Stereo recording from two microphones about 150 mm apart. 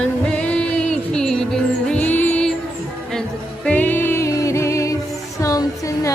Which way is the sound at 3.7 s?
10° left (ahead or behind).